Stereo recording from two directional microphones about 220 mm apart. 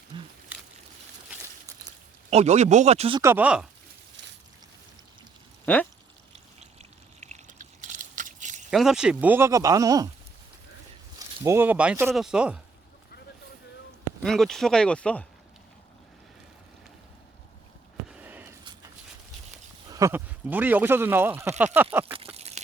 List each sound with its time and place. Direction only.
0.1 s wild animals: 20° right (ahead or behind)
2.3 s speech: 30° right (ahead or behind)
3.2 s speech: 10° right (ahead or behind)
4.2 s a sound: 55° right (ahead or behind)
5.6 s speech: 5° left (ahead or behind)
7.2 s a sound: 30° right (ahead or behind)
8.7 s speech: centre (ahead or behind)
11.4 s speech: 10° right (ahead or behind)
14.3 s speech: centre (ahead or behind)
18.1 s a sound: 10° right (ahead or behind)
19.9 s speech: 15° right (ahead or behind)
22.4 s a sound: 30° right (ahead or behind)